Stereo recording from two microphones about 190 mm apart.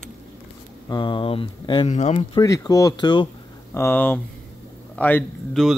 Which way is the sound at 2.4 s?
20° left (ahead or behind).